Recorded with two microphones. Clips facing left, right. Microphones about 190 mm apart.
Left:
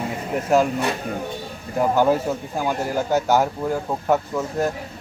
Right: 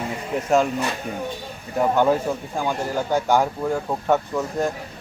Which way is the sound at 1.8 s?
5° left (ahead or behind).